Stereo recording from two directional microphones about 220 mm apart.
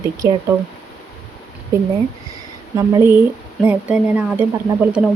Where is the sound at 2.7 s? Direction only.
10° right (ahead or behind).